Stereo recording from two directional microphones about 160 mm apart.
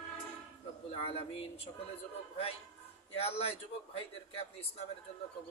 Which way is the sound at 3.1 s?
40° left (ahead or behind).